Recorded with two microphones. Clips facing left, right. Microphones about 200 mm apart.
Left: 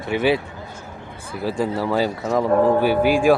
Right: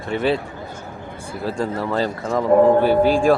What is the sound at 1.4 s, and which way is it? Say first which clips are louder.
Speech: left 1 dB; 5° left (ahead or behind).